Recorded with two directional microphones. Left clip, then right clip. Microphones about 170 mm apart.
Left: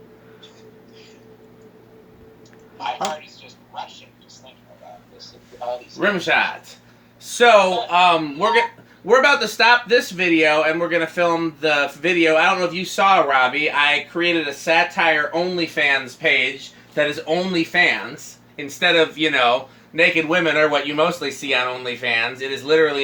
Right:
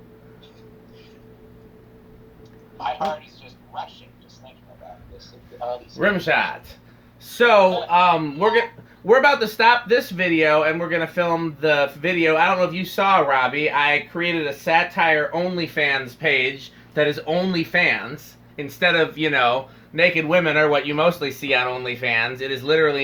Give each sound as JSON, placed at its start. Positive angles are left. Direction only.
{"t": 2.8, "sound": "speech", "side_deg": -40}
{"t": 3.4, "sound": "a sound", "side_deg": -45}
{"t": 5.2, "sound": "speech", "side_deg": -45}